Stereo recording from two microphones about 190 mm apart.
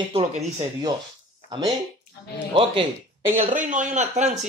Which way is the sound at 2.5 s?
30° right (ahead or behind).